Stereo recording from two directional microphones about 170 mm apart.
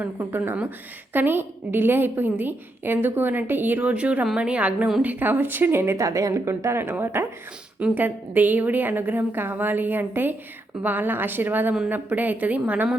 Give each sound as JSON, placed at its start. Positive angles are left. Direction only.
{"t": 0.0, "sound": "a woman's voice", "side_deg": -15}